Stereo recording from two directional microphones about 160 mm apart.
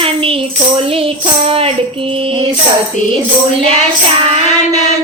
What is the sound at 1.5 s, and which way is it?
Child singing, 35° right (ahead or behind).